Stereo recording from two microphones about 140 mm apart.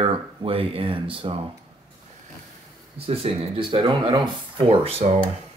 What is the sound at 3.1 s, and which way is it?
Speech, 45° right (ahead or behind).